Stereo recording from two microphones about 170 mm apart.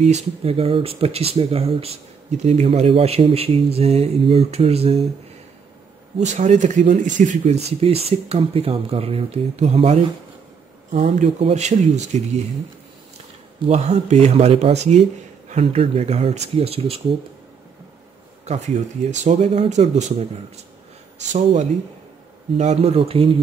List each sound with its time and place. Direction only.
0.0 s speech: 40° right (ahead or behind)
6.1 s speech: 45° right (ahead or behind)
13.7 s speech: 40° right (ahead or behind)
18.4 s speech: 40° right (ahead or behind)
22.6 s speech: 40° right (ahead or behind)